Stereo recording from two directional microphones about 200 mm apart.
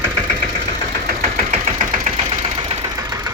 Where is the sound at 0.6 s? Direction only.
45° right (ahead or behind).